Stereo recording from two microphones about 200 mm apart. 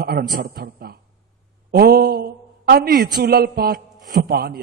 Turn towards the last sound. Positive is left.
turn(degrees=-50)  # may be behind; listen again after turning